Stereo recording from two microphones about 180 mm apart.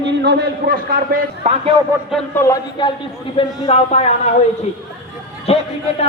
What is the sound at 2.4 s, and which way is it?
Speech, 20° left (ahead or behind).